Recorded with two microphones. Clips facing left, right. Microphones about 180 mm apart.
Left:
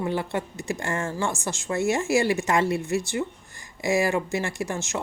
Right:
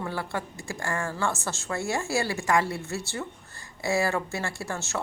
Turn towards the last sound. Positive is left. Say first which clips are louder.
# left 3 dB
turn(degrees=15)  # may be behind; listen again after turning